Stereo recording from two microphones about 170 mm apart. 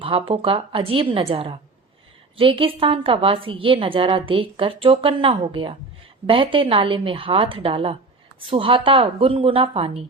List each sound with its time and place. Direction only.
0.0 s a woman's voice: 30° right (ahead or behind)